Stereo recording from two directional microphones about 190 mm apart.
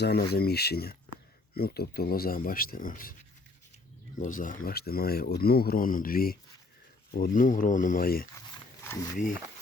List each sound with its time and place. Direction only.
0.0 s speech: 55° left (ahead or behind)
4.2 s speech: 45° left (ahead or behind)
8.8 s a sound: 10° left (ahead or behind)
9.1 s speech: 45° left (ahead or behind)